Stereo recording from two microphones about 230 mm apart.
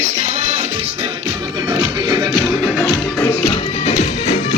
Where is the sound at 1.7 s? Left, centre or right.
Centre.